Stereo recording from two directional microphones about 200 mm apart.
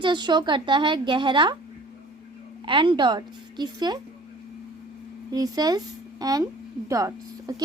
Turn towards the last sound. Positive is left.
turn(degrees=-15)  # may be behind; listen again after turning